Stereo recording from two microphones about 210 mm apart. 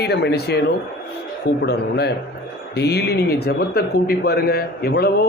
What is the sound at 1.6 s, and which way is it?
A man's voice, 50° left (ahead or behind).